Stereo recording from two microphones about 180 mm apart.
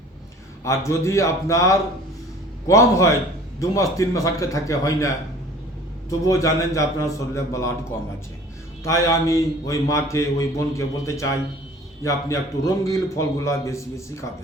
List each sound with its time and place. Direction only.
0.6 s a man's voice: 15° left (ahead or behind)